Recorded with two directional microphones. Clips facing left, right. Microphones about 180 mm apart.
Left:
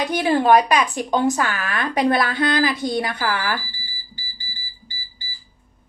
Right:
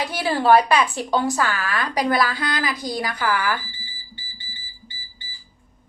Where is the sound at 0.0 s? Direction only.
20° left (ahead or behind).